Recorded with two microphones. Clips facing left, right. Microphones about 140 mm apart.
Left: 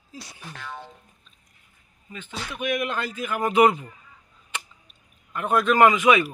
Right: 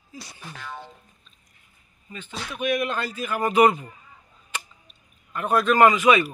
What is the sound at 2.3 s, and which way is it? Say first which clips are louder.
Music: even; centre (ahead or behind).